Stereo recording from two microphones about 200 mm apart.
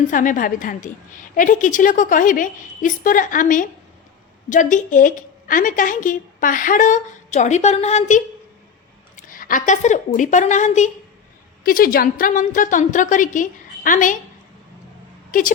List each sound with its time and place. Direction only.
0.1 s a woman's voice: 40° left (ahead or behind)
15.3 s speech: 40° left (ahead or behind)